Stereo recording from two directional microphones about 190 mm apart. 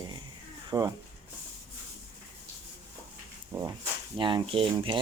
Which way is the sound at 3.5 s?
15° right (ahead or behind).